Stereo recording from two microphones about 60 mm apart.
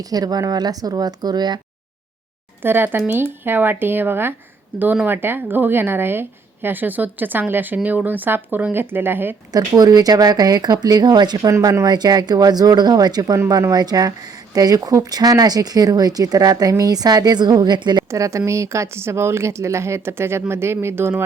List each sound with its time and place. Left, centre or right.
0.1 s speech: right
2.6 s speech: right
9.5 s speech: right
11.4 s speech: right
12.3 s speech: right
18.1 s speech: right